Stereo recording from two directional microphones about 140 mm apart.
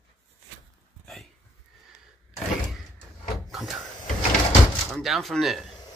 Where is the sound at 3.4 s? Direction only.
Centre (ahead or behind).